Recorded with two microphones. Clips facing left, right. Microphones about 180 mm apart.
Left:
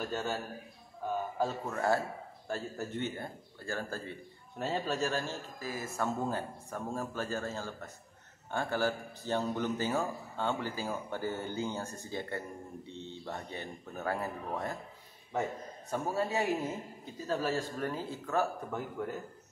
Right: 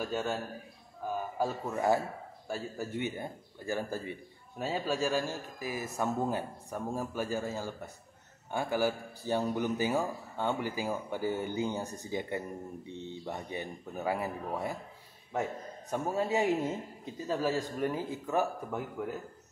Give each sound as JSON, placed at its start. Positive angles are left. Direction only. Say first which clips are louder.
{"t": 0.0, "sound": "a man's voice", "louder": "right 2 dB", "side_deg": -5}
{"t": 1.4, "sound": "a man's voice", "louder": "right 3 dB", "side_deg": -15}
{"t": 15.9, "sound": "a man's voice", "louder": "right 2 dB", "side_deg": -20}